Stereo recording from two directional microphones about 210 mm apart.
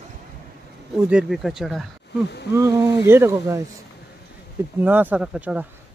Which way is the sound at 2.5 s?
15° right (ahead or behind).